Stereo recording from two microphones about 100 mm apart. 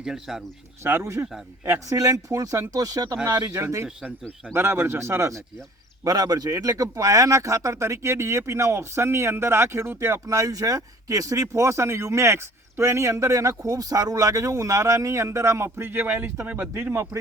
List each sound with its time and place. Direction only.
0.0 s speech: 5° right (ahead or behind)
0.9 s speech: 25° right (ahead or behind)
6.1 s speech: 40° right (ahead or behind); by 10.2 s 25° right (ahead or behind)
10.2 s speech: 35° right (ahead or behind)